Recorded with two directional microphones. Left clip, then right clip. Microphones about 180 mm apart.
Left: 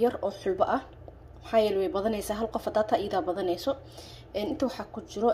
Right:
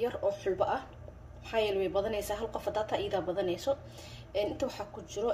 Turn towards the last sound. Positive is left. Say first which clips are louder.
# left 5 dB
turn(degrees=30)  # may be behind; listen again after turning